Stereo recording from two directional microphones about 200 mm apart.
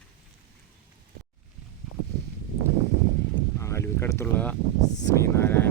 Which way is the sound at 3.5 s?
15° left (ahead or behind).